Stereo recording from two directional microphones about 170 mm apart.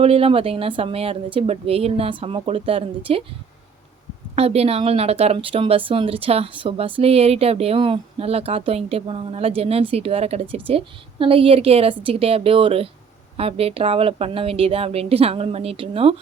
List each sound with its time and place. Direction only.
0.0 s speech: 35° right (ahead or behind)
4.4 s speech: 35° right (ahead or behind)